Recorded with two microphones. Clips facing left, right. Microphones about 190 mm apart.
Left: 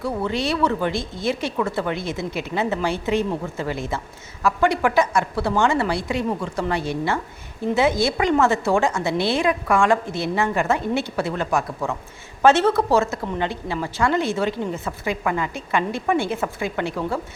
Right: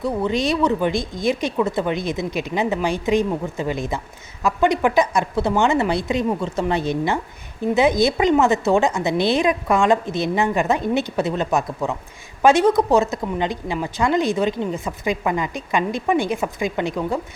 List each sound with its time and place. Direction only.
0.0 s a woman's voice: 15° right (ahead or behind)